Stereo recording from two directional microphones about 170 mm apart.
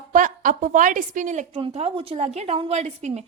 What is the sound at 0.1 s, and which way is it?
A woman's voice, 50° right (ahead or behind).